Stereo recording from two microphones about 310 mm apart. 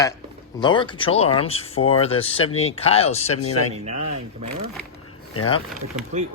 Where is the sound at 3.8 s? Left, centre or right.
Centre.